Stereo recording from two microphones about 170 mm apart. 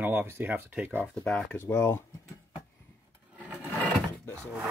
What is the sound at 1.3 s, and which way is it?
Speech, 10° left (ahead or behind).